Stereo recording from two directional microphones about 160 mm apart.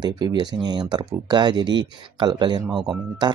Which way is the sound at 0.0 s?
25° right (ahead or behind).